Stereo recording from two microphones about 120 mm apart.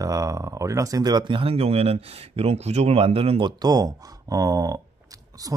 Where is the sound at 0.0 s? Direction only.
30° right (ahead or behind).